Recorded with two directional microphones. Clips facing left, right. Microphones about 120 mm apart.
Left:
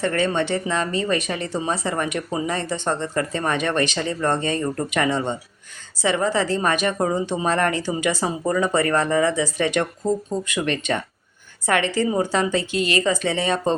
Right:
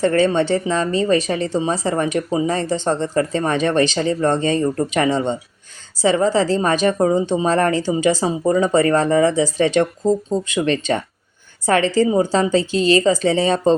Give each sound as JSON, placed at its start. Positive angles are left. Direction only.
{"t": 0.0, "sound": "speech", "side_deg": -35}